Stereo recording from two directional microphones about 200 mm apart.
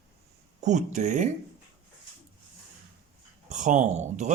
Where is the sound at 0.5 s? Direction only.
35° right (ahead or behind).